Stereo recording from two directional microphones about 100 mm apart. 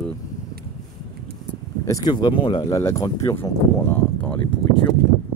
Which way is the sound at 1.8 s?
35° left (ahead or behind).